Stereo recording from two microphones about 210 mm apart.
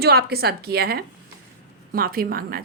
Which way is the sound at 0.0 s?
50° right (ahead or behind).